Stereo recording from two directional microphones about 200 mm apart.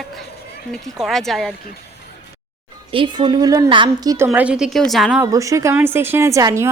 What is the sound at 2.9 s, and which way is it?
A woman's voice, 25° right (ahead or behind).